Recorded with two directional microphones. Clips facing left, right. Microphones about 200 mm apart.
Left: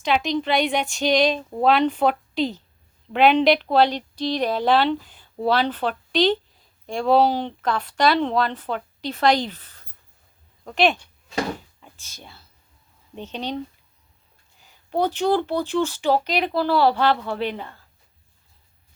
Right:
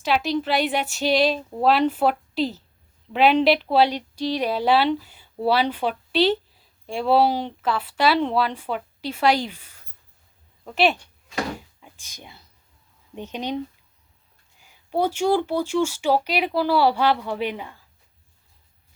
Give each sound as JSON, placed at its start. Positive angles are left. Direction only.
{"t": 0.0, "sound": "a woman's voice", "side_deg": -5}
{"t": 11.8, "sound": "a sound", "side_deg": -15}
{"t": 13.1, "sound": "speech", "side_deg": -10}
{"t": 14.6, "sound": "speech", "side_deg": -10}